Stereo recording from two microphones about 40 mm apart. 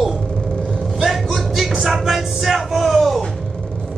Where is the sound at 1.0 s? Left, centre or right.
Centre.